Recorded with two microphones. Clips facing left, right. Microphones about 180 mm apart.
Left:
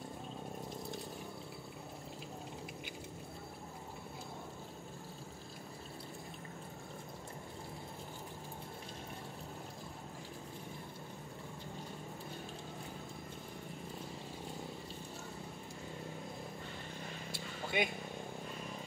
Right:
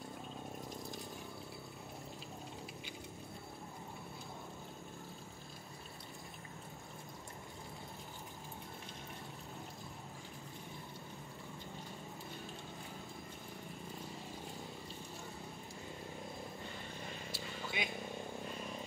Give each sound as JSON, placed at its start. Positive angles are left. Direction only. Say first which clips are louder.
{"t": 17.3, "sound": "vehicle", "louder": "left 6 dB", "side_deg": 55}